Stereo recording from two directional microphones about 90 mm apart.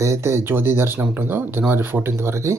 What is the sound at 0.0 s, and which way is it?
Speech, 30° right (ahead or behind).